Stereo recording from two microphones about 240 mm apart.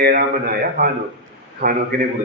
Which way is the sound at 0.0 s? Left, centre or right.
Right.